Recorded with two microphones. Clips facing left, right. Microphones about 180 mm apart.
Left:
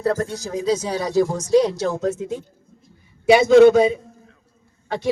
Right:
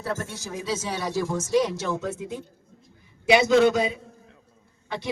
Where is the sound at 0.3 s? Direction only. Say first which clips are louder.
Left 8 dB; 35° left (ahead or behind).